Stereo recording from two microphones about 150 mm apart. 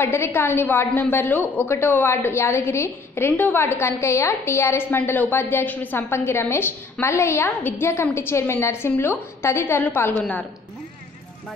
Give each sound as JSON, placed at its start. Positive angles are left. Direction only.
{"t": 0.0, "sound": "a woman's voice", "side_deg": 15}